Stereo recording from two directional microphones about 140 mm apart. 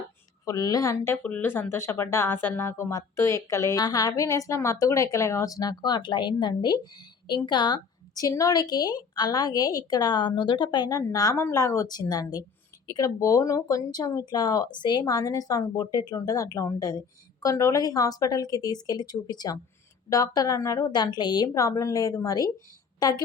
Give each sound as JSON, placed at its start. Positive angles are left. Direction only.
{"t": 0.4, "sound": "a woman's voice", "side_deg": 25}